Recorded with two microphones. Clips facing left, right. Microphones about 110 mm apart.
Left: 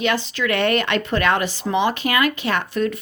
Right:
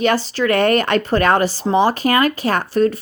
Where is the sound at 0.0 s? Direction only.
40° right (ahead or behind).